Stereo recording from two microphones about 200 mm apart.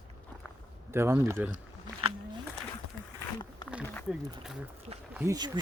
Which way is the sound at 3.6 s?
20° left (ahead or behind).